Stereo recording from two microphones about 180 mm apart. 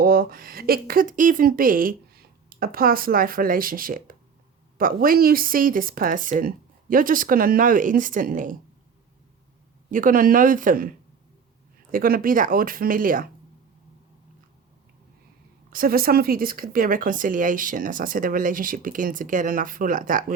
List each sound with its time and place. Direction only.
0.0 s speech: 55° right (ahead or behind)
9.9 s speech: 50° right (ahead or behind)
15.7 s speech: 55° right (ahead or behind)